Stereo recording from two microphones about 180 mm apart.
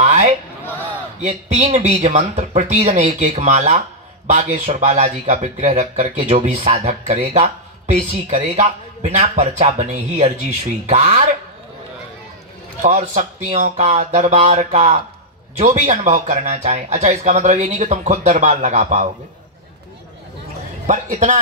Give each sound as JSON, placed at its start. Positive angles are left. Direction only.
{"t": 0.0, "sound": "a sound", "side_deg": -40}
{"t": 1.2, "sound": "speech", "side_deg": -35}
{"t": 12.8, "sound": "speech", "side_deg": -40}
{"t": 20.8, "sound": "a man's voice", "side_deg": -45}